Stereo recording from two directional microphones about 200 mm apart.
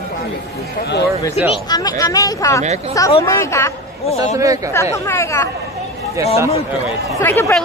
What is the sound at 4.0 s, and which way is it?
Speech, 30° left (ahead or behind).